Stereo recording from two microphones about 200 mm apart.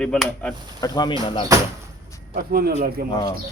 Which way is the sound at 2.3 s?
50° right (ahead or behind).